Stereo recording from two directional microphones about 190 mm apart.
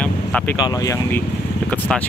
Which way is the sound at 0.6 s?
20° left (ahead or behind).